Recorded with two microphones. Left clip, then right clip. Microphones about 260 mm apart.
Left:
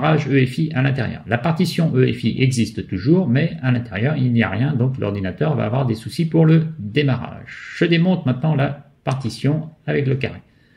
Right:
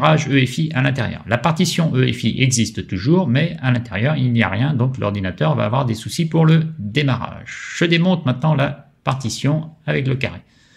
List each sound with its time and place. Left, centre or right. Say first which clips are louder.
0.3 s speech: even; right